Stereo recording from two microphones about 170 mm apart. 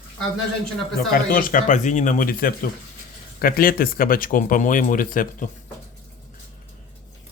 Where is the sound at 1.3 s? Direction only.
55° left (ahead or behind).